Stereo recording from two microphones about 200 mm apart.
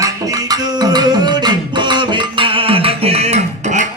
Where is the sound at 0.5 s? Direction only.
20° right (ahead or behind).